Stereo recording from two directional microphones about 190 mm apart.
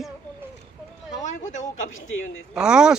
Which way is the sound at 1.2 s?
40° left (ahead or behind).